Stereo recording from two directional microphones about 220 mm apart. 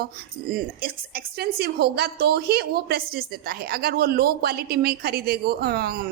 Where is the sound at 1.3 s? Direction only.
45° right (ahead or behind).